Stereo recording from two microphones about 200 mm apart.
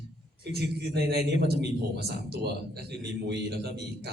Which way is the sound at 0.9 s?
55° right (ahead or behind).